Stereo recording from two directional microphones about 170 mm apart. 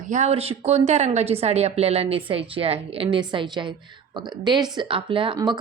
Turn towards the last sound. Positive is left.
turn(degrees=-30)  # may be behind; listen again after turning